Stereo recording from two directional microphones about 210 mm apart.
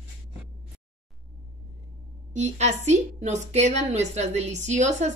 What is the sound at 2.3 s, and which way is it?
A woman's voice, 35° right (ahead or behind).